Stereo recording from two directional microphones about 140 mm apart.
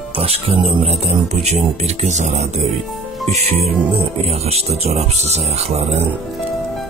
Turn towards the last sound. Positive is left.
turn(degrees=-45)  # may be behind; listen again after turning